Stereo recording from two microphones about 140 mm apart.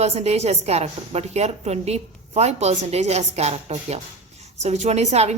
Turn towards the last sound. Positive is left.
turn(degrees=-50)  # may be behind; listen again after turning